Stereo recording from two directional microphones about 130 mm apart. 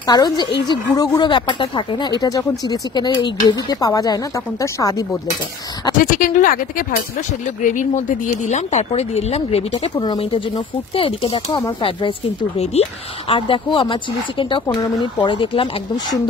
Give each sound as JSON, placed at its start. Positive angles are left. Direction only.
{"t": 0.0, "sound": "speech", "side_deg": 30}
{"t": 5.9, "sound": "speech", "side_deg": 90}
{"t": 7.6, "sound": "speech", "side_deg": 80}
{"t": 8.5, "sound": "speech", "side_deg": 60}
{"t": 9.9, "sound": "speech", "side_deg": 40}
{"t": 13.3, "sound": "speech", "side_deg": 40}